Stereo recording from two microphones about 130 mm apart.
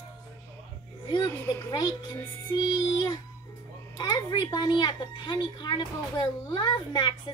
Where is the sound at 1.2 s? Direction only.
20° left (ahead or behind).